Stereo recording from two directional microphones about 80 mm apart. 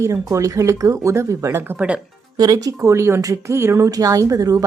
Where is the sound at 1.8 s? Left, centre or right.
Centre.